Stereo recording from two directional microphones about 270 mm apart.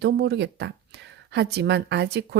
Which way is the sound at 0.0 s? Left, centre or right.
Right.